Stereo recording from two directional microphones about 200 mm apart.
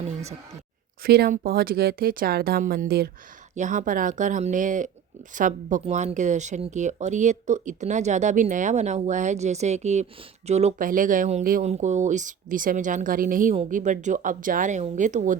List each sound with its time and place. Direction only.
1.0 s speech: 50° right (ahead or behind)
3.5 s speech: 40° right (ahead or behind)